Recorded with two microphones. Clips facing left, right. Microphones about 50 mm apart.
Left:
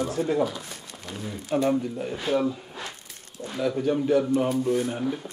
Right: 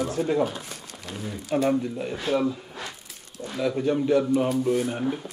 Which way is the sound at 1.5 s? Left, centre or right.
Right.